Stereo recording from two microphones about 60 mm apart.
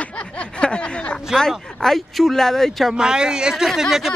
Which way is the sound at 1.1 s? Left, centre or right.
Centre.